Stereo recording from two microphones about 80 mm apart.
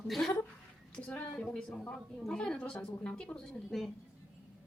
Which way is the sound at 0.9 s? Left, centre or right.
Centre.